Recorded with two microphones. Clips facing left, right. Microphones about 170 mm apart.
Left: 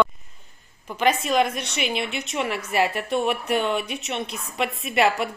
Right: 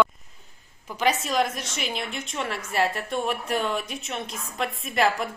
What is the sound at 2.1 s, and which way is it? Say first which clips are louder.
Speech: left 4 dB; 85° left.